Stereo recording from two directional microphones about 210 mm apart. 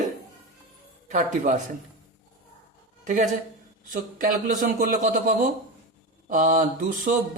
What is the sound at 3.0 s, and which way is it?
Speech, 40° right (ahead or behind).